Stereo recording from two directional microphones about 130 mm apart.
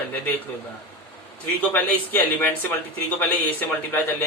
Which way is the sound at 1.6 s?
15° left (ahead or behind).